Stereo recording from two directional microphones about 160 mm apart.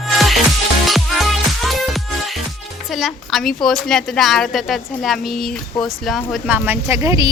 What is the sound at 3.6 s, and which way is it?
A woman's voice, 5° left (ahead or behind).